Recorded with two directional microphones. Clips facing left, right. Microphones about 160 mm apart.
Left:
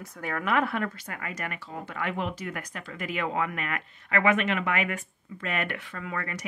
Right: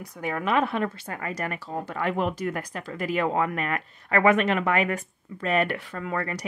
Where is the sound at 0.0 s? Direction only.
15° right (ahead or behind).